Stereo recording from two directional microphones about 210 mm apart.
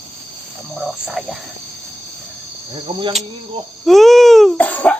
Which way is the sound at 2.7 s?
25° right (ahead or behind).